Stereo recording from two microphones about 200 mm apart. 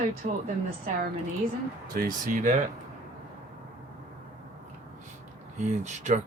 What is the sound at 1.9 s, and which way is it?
Speech, 45° right (ahead or behind).